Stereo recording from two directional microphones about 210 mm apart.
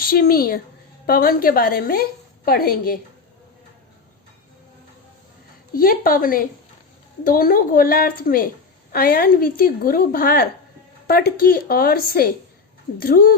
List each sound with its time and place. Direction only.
0.0 s a woman's voice: 45° left (ahead or behind)
5.7 s a woman's voice: 45° left (ahead or behind)